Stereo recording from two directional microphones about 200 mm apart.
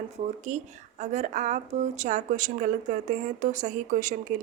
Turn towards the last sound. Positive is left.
turn(degrees=-40)  # may be behind; listen again after turning